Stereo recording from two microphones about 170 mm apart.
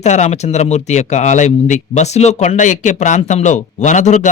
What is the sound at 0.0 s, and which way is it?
A man's voice, 40° left (ahead or behind).